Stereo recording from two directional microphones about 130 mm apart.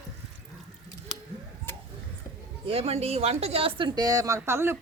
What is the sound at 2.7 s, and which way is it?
A woman's voice, 50° right (ahead or behind).